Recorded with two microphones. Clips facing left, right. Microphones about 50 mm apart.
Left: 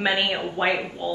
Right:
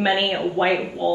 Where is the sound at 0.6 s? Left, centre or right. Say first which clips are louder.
Right 3 dB; left.